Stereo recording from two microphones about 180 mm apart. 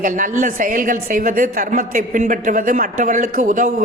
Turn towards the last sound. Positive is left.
turn(degrees=-45)  # may be behind; listen again after turning